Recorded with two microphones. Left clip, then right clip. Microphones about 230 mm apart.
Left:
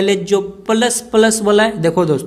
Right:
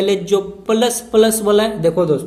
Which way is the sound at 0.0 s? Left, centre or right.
Left.